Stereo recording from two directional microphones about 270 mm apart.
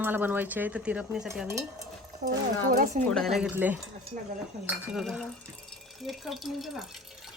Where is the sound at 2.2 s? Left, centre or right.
Right.